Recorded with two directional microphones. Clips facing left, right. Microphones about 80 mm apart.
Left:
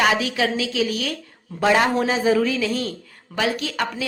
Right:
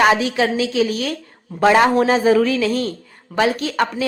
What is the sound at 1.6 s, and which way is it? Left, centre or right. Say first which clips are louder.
A woman's voice: right 5 dB; right.